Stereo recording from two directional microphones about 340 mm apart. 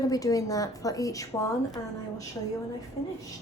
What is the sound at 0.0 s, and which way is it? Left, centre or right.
Speech, centre.